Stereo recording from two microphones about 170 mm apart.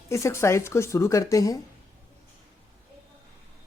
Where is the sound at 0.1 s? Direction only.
15° left (ahead or behind).